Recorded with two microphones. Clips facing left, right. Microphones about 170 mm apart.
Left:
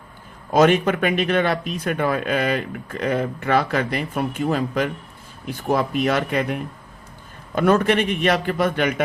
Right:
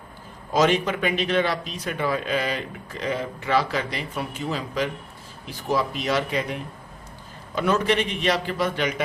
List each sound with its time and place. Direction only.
0.5 s speech: 55° left (ahead or behind)